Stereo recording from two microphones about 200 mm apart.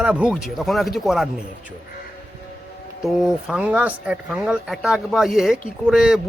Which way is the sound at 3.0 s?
5° right (ahead or behind).